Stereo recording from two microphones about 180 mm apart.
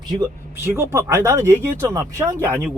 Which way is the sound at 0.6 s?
15° right (ahead or behind).